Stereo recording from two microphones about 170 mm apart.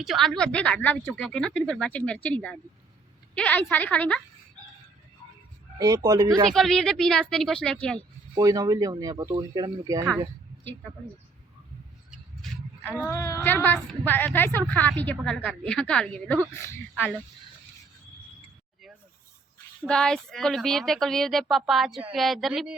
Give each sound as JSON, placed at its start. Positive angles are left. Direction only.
{"t": 0.0, "sound": "a woman's voice", "side_deg": 0}
{"t": 5.8, "sound": "speech", "side_deg": -20}
{"t": 6.5, "sound": "speech", "side_deg": 0}
{"t": 7.9, "sound": "speech", "side_deg": -20}
{"t": 13.0, "sound": "a woman's voice", "side_deg": 15}
{"t": 19.9, "sound": "speech", "side_deg": 5}